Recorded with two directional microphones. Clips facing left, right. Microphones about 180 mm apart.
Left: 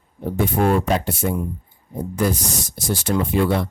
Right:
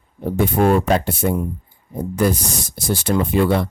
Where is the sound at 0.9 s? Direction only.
60° right (ahead or behind).